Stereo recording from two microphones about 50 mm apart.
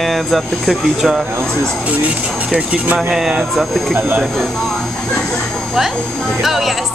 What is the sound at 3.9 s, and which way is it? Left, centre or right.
Speech, right.